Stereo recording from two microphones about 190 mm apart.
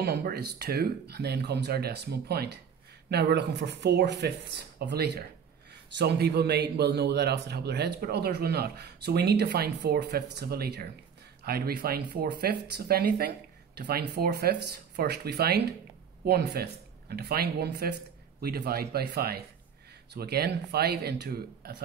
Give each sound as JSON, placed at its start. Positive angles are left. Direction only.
{"t": 0.0, "sound": "a man's voice", "side_deg": -55}